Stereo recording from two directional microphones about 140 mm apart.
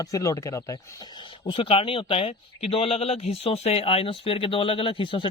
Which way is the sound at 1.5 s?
40° left (ahead or behind).